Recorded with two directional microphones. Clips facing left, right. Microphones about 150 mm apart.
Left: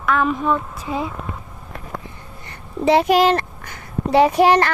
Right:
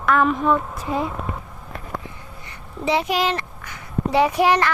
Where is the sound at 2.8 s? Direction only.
50° left (ahead or behind); by 4.7 s 30° left (ahead or behind).